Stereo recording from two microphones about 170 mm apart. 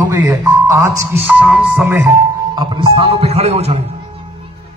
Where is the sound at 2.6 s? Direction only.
30° right (ahead or behind).